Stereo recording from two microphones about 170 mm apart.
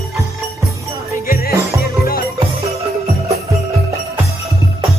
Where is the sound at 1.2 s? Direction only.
60° left (ahead or behind).